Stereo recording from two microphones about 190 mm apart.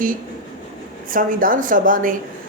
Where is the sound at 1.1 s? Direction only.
45° right (ahead or behind).